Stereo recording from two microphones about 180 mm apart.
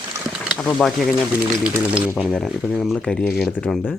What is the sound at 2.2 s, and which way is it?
Speech, centre (ahead or behind).